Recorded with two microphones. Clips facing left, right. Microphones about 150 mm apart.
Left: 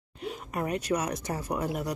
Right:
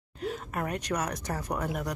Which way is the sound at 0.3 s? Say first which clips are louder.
Left 2 dB; 10° left (ahead or behind).